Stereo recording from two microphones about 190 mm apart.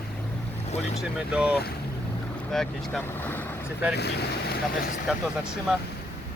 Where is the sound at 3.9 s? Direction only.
60° left (ahead or behind).